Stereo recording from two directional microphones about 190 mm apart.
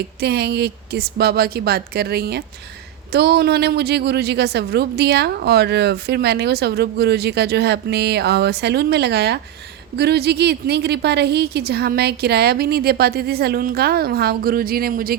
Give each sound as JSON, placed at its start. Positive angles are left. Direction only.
{"t": 0.2, "sound": "a woman's voice", "side_deg": -60}